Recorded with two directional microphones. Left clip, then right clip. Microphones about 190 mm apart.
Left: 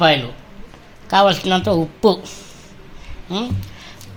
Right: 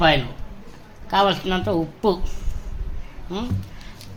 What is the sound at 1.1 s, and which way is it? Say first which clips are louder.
Speech: left 5 dB; 50° left (ahead or behind).